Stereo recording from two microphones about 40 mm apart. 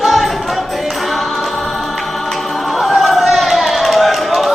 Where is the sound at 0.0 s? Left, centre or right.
Centre.